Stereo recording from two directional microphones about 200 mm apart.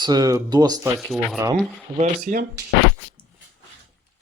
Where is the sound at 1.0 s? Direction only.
Centre (ahead or behind).